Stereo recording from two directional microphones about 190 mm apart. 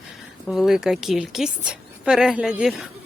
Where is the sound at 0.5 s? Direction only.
Centre (ahead or behind).